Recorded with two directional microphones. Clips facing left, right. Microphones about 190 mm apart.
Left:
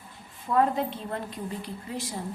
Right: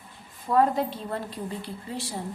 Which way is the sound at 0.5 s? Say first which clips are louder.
Right 2 dB; 35° right (ahead or behind).